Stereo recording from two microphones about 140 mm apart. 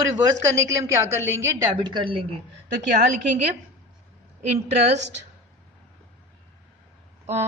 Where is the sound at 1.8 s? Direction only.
40° right (ahead or behind).